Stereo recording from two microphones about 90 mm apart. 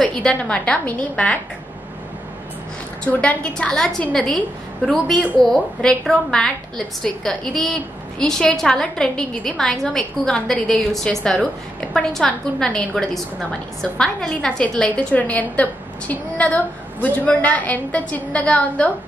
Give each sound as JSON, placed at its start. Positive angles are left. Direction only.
{"t": 0.0, "sound": "a woman's voice", "side_deg": 10}
{"t": 3.0, "sound": "a woman's voice", "side_deg": 15}